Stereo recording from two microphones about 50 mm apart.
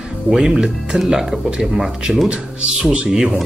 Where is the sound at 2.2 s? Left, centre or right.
Right.